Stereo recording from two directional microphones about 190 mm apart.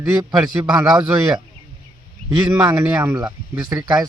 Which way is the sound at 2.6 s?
15° right (ahead or behind).